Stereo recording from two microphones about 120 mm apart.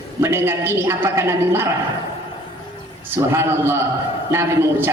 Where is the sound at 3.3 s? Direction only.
20° right (ahead or behind).